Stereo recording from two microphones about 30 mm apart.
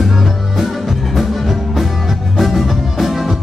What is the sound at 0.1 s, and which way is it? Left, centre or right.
Music, centre.